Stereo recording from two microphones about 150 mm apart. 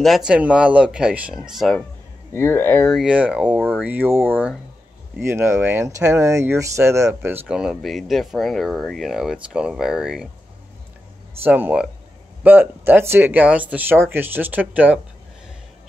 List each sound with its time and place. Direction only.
0.0 s speech: 5° right (ahead or behind)
2.3 s speech: 15° left (ahead or behind)
3.1 s speech: 5° right (ahead or behind)
7.5 s speech: 5° right (ahead or behind)
11.4 s speech: 10° right (ahead or behind)